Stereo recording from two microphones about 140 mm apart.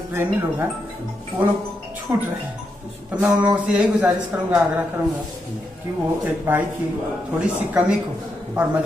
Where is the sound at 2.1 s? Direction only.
15° right (ahead or behind).